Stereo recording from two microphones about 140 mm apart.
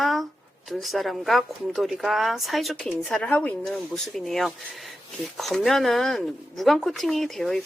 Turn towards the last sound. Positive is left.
turn(degrees=0)  # may be behind; listen again after turning